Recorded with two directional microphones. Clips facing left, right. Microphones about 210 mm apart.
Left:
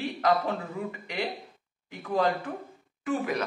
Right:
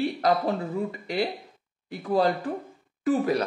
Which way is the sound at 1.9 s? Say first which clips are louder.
Right 3 dB; 35° right (ahead or behind).